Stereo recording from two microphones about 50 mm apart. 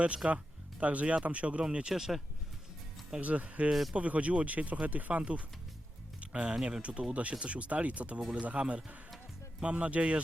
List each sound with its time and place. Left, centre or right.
0.2 s speech: centre
1.6 s speech: centre
3.2 s speech: right
3.7 s speech: centre
3.9 s speech: right
6.1 s music: right
6.7 s speech: right